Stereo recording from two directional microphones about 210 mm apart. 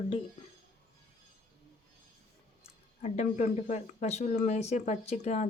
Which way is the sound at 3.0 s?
35° left (ahead or behind).